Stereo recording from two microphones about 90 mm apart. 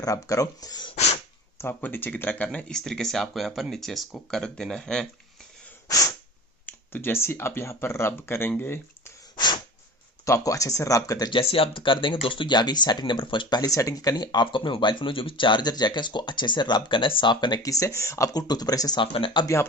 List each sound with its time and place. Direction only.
0.0 s speech: 40° left (ahead or behind)
1.5 s speech: 25° left (ahead or behind); by 5.0 s 5° left (ahead or behind)
6.7 s speech: 25° left (ahead or behind)
9.3 s a sound: 55° left (ahead or behind)
10.2 s speech: 35° left (ahead or behind)
11.3 s speech: 85° left; by 13.7 s 60° left (ahead or behind)
13.7 s speech: 40° left (ahead or behind); by 17.7 s 55° left (ahead or behind)
17.7 s speech: 35° left (ahead or behind)
18.9 s speech: 70° left (ahead or behind)